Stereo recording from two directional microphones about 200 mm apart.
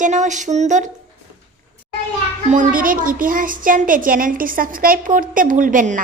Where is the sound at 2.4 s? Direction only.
40° right (ahead or behind).